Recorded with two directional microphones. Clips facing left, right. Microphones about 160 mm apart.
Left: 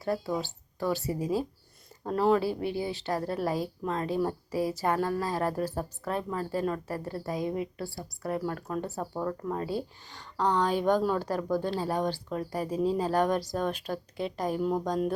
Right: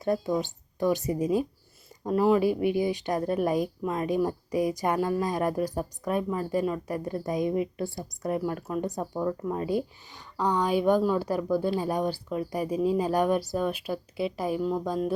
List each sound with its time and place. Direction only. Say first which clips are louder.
0.0 s speech: right 4 dB; 20° right (ahead or behind)
2.0 s speech: right 3 dB; 10° right (ahead or behind)